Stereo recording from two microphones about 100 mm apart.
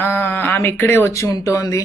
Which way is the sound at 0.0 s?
20° left (ahead or behind).